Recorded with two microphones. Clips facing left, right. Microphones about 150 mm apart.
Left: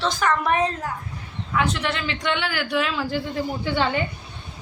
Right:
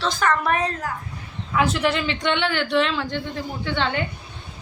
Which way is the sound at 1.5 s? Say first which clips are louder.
Right 3 dB; 5° right (ahead or behind).